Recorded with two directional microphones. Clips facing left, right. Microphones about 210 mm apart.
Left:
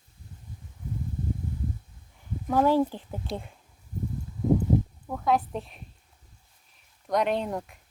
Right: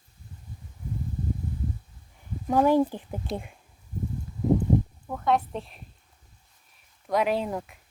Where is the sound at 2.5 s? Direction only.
15° right (ahead or behind).